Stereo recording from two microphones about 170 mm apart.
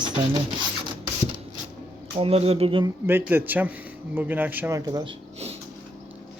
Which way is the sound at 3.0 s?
10° right (ahead or behind).